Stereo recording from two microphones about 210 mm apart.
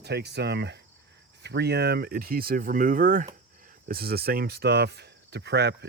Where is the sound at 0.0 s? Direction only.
50° right (ahead or behind).